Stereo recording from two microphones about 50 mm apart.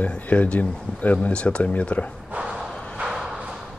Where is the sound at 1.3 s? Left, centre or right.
Left.